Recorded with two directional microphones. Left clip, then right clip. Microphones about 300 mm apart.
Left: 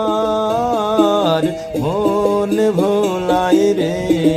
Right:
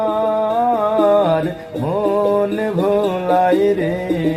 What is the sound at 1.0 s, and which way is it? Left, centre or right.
Music, centre.